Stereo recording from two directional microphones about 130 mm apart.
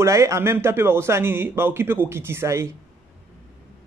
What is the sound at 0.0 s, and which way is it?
A man's voice, 25° right (ahead or behind).